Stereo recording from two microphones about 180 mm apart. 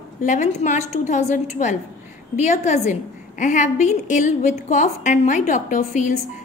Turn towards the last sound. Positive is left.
turn(degrees=45)  # may be behind; listen again after turning